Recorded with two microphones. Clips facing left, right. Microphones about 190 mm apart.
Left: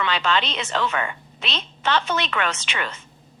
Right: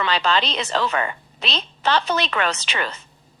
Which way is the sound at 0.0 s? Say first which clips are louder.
Right 2 dB; 35° right (ahead or behind).